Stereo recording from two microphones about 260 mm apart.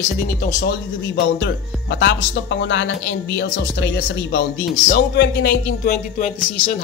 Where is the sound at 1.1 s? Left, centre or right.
Left.